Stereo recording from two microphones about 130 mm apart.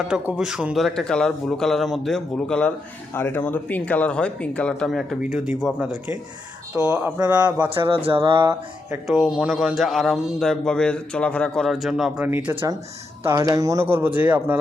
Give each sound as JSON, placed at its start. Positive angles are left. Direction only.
{"t": 0.1, "sound": "a man's voice", "side_deg": -5}
{"t": 7.9, "sound": "speech", "side_deg": -45}
{"t": 9.0, "sound": "a man's voice", "side_deg": 0}
{"t": 12.2, "sound": "speech", "side_deg": -15}
{"t": 13.2, "sound": "speech", "side_deg": -25}